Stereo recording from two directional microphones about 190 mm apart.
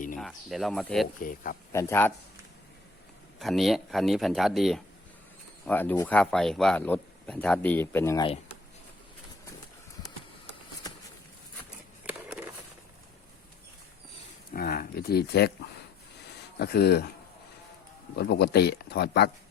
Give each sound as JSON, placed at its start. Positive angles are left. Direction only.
{"t": 0.2, "sound": "speech", "side_deg": 0}
{"t": 1.2, "sound": "speech", "side_deg": 45}
{"t": 1.7, "sound": "speech", "side_deg": 15}
{"t": 3.3, "sound": "speech", "side_deg": 0}
{"t": 5.6, "sound": "speech", "side_deg": 10}
{"t": 12.0, "sound": "skateboard", "side_deg": -5}
{"t": 14.5, "sound": "speech", "side_deg": 50}
{"t": 16.6, "sound": "speech", "side_deg": 60}
{"t": 18.2, "sound": "speech", "side_deg": 60}